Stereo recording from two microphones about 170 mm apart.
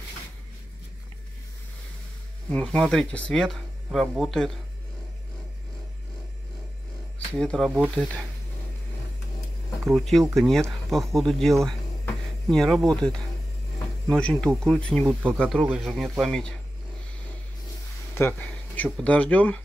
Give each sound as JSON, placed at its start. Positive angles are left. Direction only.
{"t": 2.5, "sound": "speech", "side_deg": 5}
{"t": 7.3, "sound": "speech", "side_deg": 5}
{"t": 9.9, "sound": "speech", "side_deg": 0}
{"t": 18.1, "sound": "a sound", "side_deg": 10}
{"t": 18.9, "sound": "speech", "side_deg": 5}